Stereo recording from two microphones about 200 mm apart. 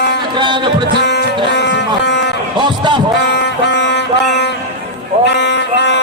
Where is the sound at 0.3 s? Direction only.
25° right (ahead or behind).